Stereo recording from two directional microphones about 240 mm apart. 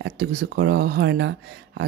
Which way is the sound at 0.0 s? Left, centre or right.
Right.